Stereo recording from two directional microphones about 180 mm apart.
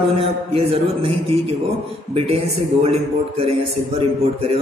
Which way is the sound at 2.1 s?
35° right (ahead or behind).